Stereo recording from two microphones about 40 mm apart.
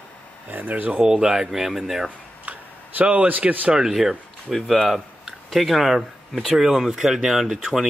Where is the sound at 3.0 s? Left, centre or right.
Right.